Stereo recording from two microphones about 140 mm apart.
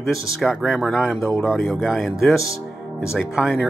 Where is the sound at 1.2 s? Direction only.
20° left (ahead or behind).